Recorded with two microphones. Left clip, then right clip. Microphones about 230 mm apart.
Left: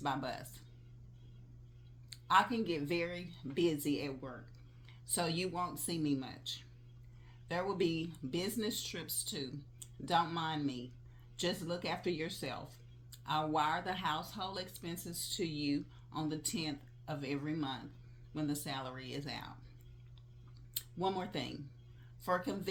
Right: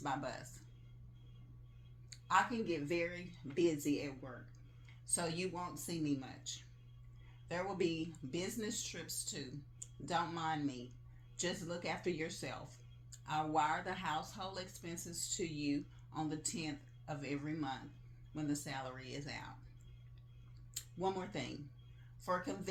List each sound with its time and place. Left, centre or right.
0.0 s speech: left
2.2 s speech: left
20.7 s speech: left